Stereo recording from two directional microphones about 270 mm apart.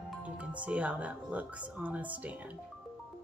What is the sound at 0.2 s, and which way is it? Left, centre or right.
Speech, centre.